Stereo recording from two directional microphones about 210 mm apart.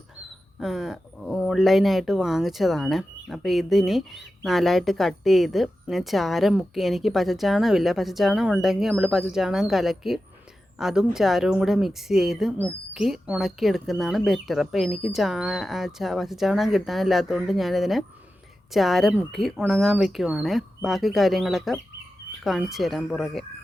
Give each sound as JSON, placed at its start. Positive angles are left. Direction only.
{"t": 0.6, "sound": "speech", "side_deg": 0}